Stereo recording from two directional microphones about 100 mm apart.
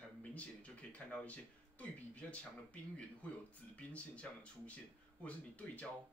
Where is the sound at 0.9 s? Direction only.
15° left (ahead or behind).